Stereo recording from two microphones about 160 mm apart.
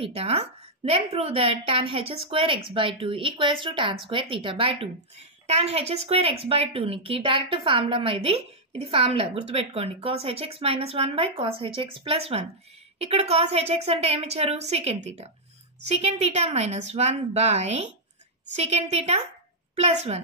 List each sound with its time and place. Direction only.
0.0 s a woman's voice: 40° right (ahead or behind)